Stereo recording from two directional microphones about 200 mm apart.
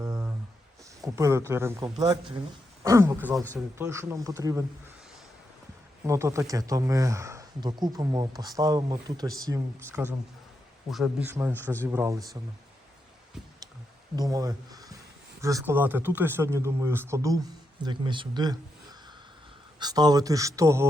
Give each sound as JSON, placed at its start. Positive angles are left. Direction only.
{"t": 0.0, "sound": "a sound", "side_deg": -15}
{"t": 1.0, "sound": "speech", "side_deg": -15}
{"t": 6.0, "sound": "speech", "side_deg": -15}
{"t": 11.5, "sound": "speech", "side_deg": 10}
{"t": 11.9, "sound": "speech", "side_deg": -15}
{"t": 14.2, "sound": "speech", "side_deg": -20}